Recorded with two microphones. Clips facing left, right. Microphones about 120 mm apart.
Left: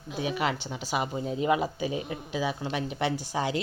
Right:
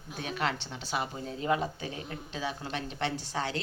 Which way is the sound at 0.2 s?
10° left (ahead or behind).